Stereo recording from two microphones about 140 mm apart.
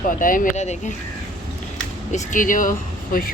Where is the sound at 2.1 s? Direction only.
65° left (ahead or behind); by 3.3 s 80° left.